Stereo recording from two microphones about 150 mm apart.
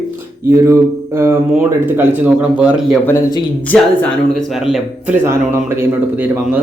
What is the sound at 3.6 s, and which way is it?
Speech, 5° left (ahead or behind).